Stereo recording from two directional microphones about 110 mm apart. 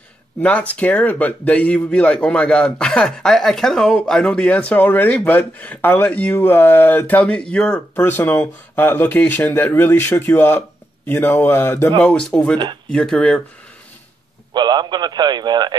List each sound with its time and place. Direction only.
0.4 s speech: 15° left (ahead or behind)
14.5 s speech: 40° right (ahead or behind)